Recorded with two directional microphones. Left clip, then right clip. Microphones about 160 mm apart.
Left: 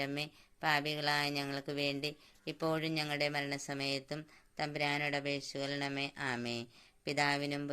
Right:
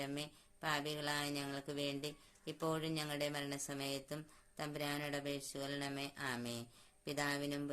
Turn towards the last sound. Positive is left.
turn(degrees=20)  # may be behind; listen again after turning